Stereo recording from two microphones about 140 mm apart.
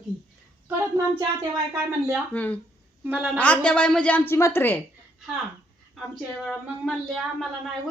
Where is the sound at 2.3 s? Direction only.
10° left (ahead or behind).